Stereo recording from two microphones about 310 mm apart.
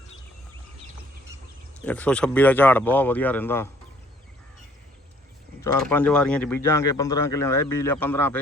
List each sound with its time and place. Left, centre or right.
1.8 s speech: centre
5.5 s speech: centre